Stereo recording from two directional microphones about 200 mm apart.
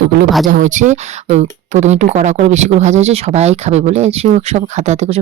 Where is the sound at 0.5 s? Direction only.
40° right (ahead or behind).